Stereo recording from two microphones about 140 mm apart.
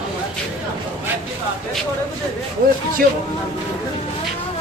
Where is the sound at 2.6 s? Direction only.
90° right.